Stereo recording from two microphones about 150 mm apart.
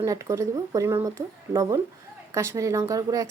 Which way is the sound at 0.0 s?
20° right (ahead or behind).